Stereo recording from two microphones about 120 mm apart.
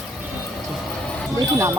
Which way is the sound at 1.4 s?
25° right (ahead or behind).